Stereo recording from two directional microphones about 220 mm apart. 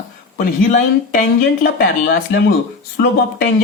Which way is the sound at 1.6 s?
40° left (ahead or behind).